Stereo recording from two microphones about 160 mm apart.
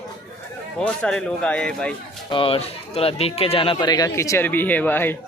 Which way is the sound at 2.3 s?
35° left (ahead or behind).